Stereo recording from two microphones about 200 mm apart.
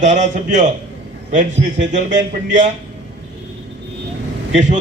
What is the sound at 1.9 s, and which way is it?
Speech, 40° right (ahead or behind).